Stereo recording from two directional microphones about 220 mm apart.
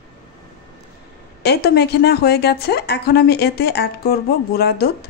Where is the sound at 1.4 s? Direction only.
50° left (ahead or behind).